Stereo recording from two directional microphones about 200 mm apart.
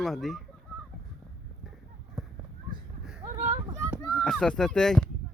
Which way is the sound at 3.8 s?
5° right (ahead or behind).